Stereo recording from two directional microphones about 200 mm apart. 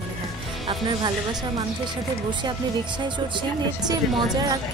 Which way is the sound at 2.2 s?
20° right (ahead or behind).